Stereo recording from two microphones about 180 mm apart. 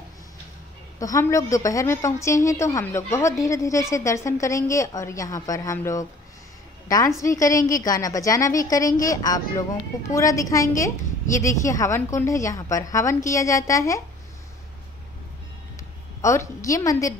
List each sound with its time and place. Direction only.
0.9 s a woman's voice: 20° left (ahead or behind)
7.2 s a woman's voice: 20° left (ahead or behind)
16.2 s a woman's voice: 15° left (ahead or behind)